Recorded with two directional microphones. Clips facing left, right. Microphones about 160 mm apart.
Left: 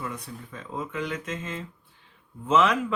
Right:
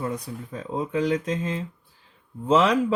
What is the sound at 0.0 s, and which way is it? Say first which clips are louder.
Speech: right 6 dB; 35° right (ahead or behind).